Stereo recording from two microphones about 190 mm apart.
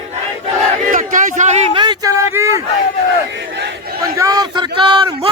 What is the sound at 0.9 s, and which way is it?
Speech, 45° right (ahead or behind).